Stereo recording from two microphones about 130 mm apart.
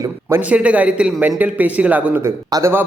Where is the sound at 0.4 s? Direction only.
10° right (ahead or behind).